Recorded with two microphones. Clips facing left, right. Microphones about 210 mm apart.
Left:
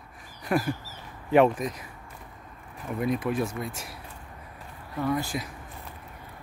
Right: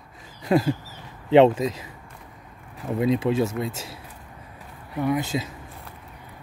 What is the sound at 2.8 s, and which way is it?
Speech, 25° right (ahead or behind).